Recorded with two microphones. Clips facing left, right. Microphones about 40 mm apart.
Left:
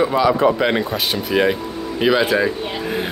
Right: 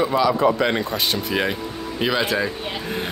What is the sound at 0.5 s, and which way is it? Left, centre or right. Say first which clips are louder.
A woman's voice: left 3 dB; centre.